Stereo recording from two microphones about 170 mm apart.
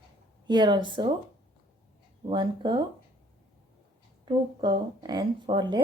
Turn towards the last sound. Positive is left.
turn(degrees=-25)  # may be behind; listen again after turning